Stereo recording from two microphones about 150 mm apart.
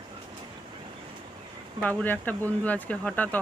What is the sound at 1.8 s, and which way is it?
Speech, 10° left (ahead or behind).